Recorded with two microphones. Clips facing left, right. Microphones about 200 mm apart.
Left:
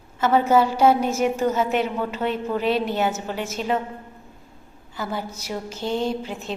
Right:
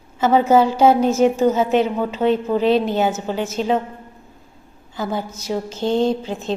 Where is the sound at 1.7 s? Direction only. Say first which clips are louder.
Right 5 dB; 30° right (ahead or behind).